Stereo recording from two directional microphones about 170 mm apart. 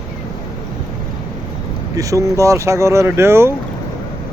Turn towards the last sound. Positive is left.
turn(degrees=-15)  # may be behind; listen again after turning